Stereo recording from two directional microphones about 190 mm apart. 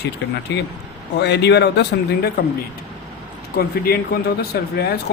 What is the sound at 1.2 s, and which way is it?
Speech, 60° left (ahead or behind).